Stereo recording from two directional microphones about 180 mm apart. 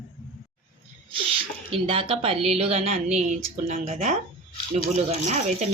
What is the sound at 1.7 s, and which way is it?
A woman's voice, 30° right (ahead or behind).